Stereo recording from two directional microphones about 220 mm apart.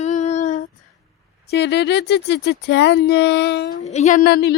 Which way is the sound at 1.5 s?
50° left (ahead or behind).